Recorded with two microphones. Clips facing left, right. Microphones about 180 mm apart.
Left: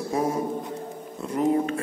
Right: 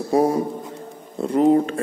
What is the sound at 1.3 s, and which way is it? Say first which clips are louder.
Speech: right 6 dB; 30° right (ahead or behind).